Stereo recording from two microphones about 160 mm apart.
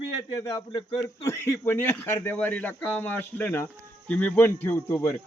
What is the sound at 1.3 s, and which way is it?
Speech, 15° left (ahead or behind).